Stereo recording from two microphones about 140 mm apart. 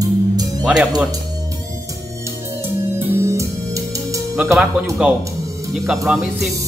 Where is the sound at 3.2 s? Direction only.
20° right (ahead or behind).